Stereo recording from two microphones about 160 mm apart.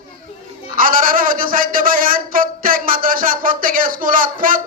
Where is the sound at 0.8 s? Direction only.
60° right (ahead or behind).